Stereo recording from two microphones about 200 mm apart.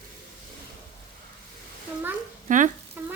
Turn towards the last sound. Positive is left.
turn(degrees=-10)  # may be behind; listen again after turning